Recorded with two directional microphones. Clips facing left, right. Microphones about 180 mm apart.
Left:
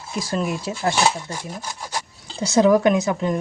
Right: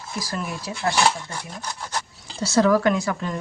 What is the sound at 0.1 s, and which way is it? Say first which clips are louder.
Speech: left 6 dB; 25° left (ahead or behind).